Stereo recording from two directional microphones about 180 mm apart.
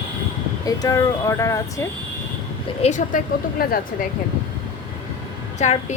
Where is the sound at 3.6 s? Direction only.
55° left (ahead or behind).